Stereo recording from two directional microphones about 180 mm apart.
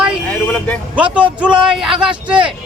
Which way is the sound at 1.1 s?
5° right (ahead or behind).